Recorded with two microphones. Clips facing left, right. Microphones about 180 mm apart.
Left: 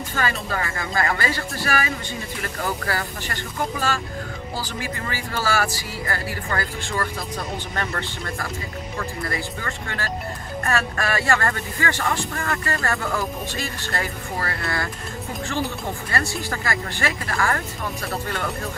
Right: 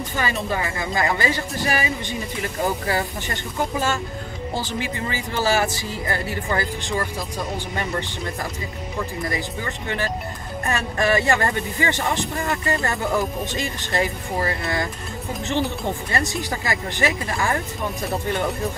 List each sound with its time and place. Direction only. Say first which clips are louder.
0.1 s speech: right 1 dB; 20° right (ahead or behind)
4.6 s speech: right 4 dB; 20° right (ahead or behind)
16.1 s speech: right 2 dB; 20° right (ahead or behind)